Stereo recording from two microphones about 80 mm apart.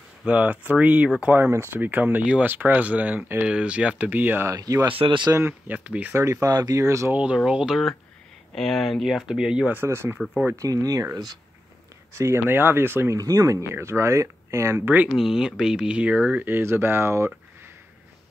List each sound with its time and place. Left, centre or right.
0.2 s speech: centre
4.5 s speech: right
5.0 s speech: right
5.7 s speech: right
6.1 s speech: right
6.5 s speech: right
7.1 s speech: centre
8.5 s speech: centre
9.7 s speech: right
10.5 s speech: right
12.1 s speech: right
13.2 s speech: right
15.1 s speech: centre; by 17.3 s right